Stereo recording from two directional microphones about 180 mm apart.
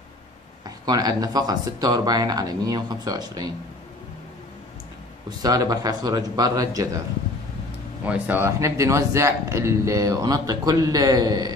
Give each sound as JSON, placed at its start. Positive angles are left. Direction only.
{"t": 0.7, "sound": "speech", "side_deg": -20}
{"t": 5.4, "sound": "speech", "side_deg": -20}
{"t": 8.0, "sound": "speech", "side_deg": -10}